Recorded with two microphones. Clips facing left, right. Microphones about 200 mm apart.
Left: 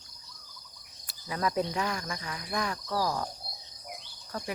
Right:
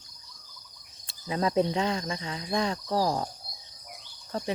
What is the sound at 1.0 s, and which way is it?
Speech, 25° right (ahead or behind).